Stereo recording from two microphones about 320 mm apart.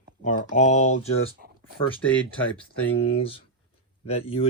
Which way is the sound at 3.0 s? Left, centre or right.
Centre.